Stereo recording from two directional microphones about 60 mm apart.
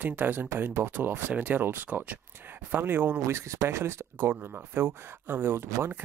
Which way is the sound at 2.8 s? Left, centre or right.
Right.